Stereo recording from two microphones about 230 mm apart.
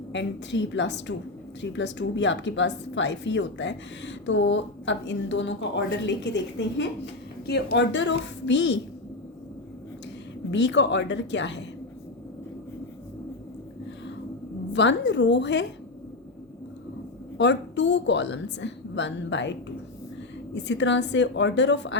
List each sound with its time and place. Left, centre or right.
0.1 s speech: left
10.5 s speech: left
14.7 s speech: left
17.3 s speech: left